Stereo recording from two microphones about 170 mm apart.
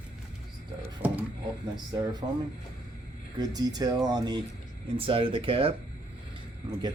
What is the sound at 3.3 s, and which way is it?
Speech, 25° right (ahead or behind).